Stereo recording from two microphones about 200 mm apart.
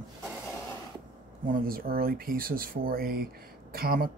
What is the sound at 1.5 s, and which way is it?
Speech, 45° right (ahead or behind).